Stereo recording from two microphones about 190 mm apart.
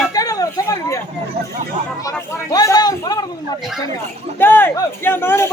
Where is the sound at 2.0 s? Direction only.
20° left (ahead or behind).